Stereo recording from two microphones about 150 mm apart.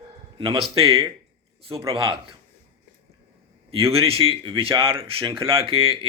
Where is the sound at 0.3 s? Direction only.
35° right (ahead or behind).